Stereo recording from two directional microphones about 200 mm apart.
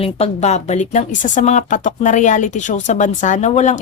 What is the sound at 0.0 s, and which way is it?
Speech, 30° left (ahead or behind).